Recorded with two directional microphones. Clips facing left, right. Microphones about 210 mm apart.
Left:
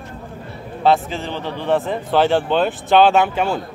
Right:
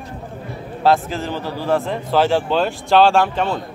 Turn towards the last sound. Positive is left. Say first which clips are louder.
# even
turn(degrees=5)  # may be behind; listen again after turning